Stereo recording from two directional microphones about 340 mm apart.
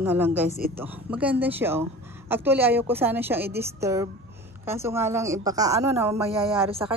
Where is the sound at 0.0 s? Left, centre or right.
Centre.